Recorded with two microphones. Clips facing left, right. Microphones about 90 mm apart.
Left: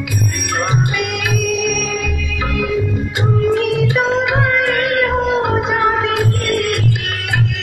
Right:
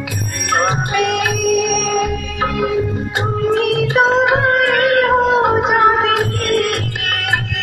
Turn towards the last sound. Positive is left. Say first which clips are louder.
# right 1 dB
turn(degrees=-45)  # may be behind; listen again after turning